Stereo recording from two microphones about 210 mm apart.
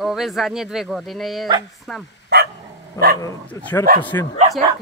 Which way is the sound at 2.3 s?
50° right (ahead or behind).